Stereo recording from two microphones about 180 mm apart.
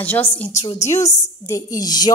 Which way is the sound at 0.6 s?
40° left (ahead or behind).